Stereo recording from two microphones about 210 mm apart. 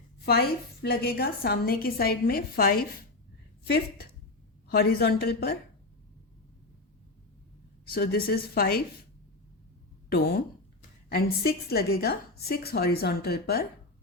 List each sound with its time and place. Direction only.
0.3 s a woman's voice: 45° left (ahead or behind)
7.9 s a woman's voice: 45° left (ahead or behind)
10.1 s a woman's voice: 45° left (ahead or behind)